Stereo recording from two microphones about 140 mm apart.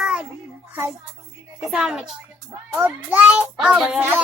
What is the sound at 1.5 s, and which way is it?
A child's voice, 5° right (ahead or behind).